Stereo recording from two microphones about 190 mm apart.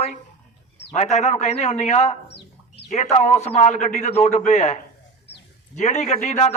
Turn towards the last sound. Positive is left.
turn(degrees=35)  # may be behind; listen again after turning